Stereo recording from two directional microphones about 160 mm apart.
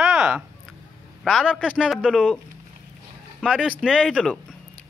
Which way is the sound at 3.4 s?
5° right (ahead or behind).